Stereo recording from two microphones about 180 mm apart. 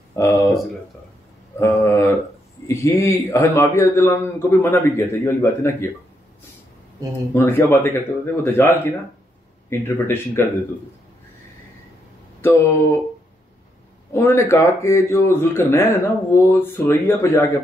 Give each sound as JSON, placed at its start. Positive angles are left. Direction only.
{"t": 0.1, "sound": "speech", "side_deg": 15}
{"t": 1.6, "sound": "speech", "side_deg": 15}
{"t": 7.3, "sound": "speech", "side_deg": 10}
{"t": 12.4, "sound": "speech", "side_deg": 15}
{"t": 14.1, "sound": "speech", "side_deg": 15}